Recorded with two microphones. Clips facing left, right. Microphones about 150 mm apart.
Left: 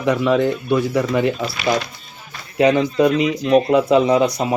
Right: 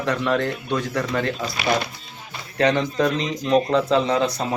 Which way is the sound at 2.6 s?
10° left (ahead or behind).